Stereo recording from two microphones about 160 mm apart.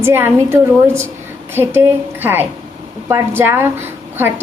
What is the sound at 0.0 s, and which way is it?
A woman's voice, 15° right (ahead or behind).